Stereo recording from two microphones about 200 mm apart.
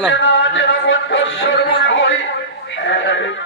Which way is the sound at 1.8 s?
65° left (ahead or behind).